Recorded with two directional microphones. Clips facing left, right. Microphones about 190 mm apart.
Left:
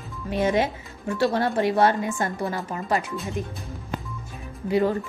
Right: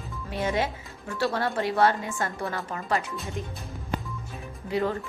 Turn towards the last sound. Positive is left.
turn(degrees=15)  # may be behind; listen again after turning